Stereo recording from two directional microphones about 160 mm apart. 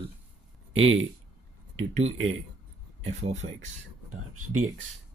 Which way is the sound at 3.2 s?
45° right (ahead or behind).